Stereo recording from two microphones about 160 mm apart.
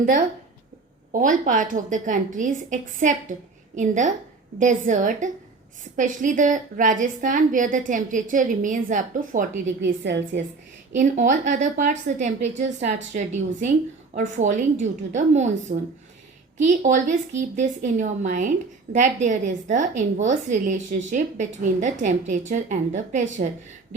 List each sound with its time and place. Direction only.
1.2 s a woman's voice: 55° right (ahead or behind)
9.8 s a woman's voice: 90° right
10.9 s a woman's voice: 50° right (ahead or behind)
16.6 s a woman's voice: 50° right (ahead or behind)